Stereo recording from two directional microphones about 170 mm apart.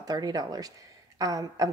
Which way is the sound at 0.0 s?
20° right (ahead or behind).